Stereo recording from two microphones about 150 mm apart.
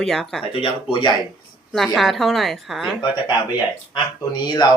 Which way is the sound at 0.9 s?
30° left (ahead or behind).